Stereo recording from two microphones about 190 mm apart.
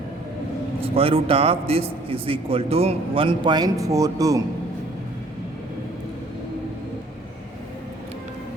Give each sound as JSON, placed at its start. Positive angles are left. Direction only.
{"t": 0.8, "sound": "a man's voice", "side_deg": -30}